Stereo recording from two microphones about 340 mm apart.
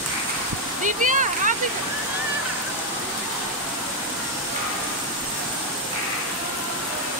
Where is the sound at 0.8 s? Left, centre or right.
Right.